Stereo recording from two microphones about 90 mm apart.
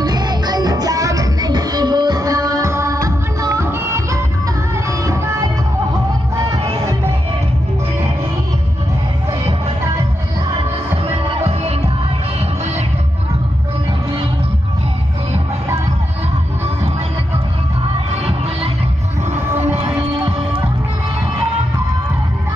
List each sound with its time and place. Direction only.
0.0 s music: 50° right (ahead or behind); by 5.5 s 35° right (ahead or behind)
20.0 s music: 65° right (ahead or behind)